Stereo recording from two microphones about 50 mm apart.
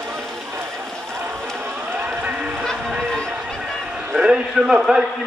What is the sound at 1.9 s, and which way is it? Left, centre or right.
Run, right.